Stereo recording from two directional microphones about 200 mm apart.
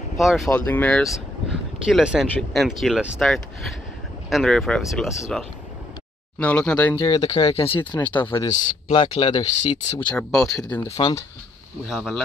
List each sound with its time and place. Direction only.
0.2 s speech: centre (ahead or behind)
7.0 s speech: 20° left (ahead or behind)
10.1 s speech: centre (ahead or behind)
11.0 s speech: 20° left (ahead or behind)
11.9 s speech: centre (ahead or behind)